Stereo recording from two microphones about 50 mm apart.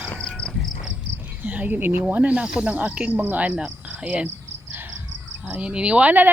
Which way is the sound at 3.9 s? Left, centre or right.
Right.